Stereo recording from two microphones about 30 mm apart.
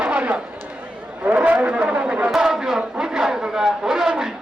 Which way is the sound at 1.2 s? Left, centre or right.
Right.